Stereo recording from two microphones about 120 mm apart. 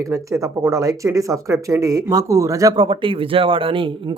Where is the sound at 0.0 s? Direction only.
25° right (ahead or behind).